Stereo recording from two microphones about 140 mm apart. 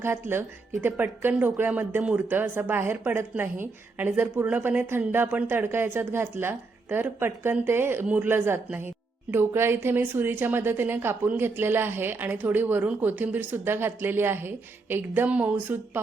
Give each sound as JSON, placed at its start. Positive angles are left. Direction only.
{"t": 0.0, "sound": "speech", "side_deg": -15}